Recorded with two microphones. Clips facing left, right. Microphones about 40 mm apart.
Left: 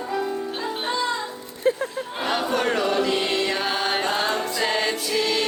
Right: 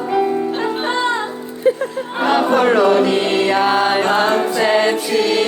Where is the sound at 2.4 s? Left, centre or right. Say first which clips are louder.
Right 10 dB; right.